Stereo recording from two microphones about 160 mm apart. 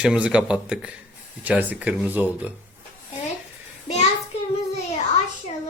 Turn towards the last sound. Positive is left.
turn(degrees=40)  # may be behind; listen again after turning